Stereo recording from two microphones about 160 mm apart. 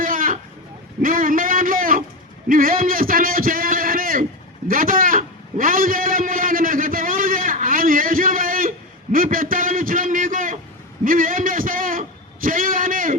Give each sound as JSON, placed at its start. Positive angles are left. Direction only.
{"t": 0.0, "sound": "vehicle", "side_deg": -60}
{"t": 1.0, "sound": "a man's voice", "side_deg": -60}
{"t": 4.7, "sound": "a sound", "side_deg": -60}